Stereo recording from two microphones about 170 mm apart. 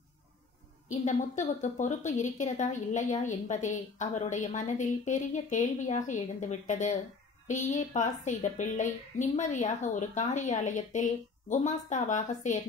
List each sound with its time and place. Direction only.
1.0 s a woman's voice: 45° left (ahead or behind)